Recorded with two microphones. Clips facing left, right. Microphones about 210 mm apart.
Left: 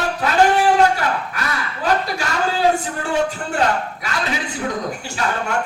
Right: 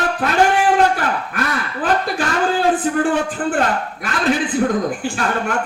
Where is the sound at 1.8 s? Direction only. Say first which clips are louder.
Right 1 dB; 50° right (ahead or behind).